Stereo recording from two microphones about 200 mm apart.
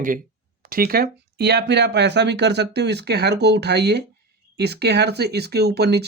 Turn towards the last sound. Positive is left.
turn(degrees=-55)  # may be behind; listen again after turning